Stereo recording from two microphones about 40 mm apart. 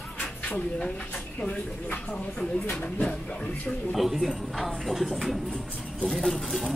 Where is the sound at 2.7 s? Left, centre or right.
Left.